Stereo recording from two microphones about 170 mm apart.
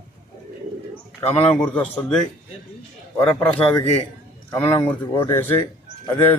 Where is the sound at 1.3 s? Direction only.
40° left (ahead or behind).